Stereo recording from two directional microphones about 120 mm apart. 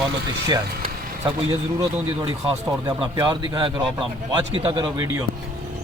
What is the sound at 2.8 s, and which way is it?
A man's voice, 30° right (ahead or behind).